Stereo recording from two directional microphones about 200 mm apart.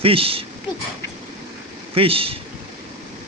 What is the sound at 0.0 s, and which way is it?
Speech, 30° right (ahead or behind).